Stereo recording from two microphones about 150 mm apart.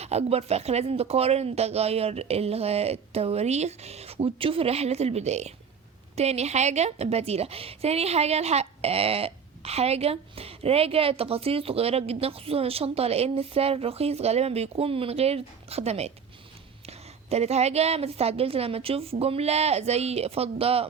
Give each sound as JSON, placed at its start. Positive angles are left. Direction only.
{"t": 0.0, "sound": "a woman's voice", "side_deg": -45}